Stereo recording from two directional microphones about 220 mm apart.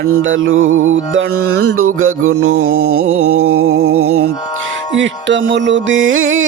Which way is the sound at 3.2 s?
80° right.